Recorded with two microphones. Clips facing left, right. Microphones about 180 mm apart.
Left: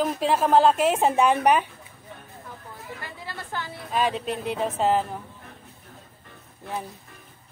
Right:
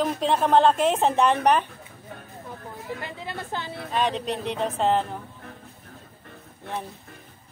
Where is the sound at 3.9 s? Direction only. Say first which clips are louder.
Even; 5° left (ahead or behind).